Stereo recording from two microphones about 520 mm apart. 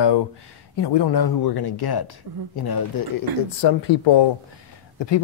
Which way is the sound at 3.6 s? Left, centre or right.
Left.